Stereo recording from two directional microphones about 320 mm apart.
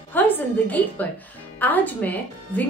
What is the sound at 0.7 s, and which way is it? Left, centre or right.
A woman's voice, centre.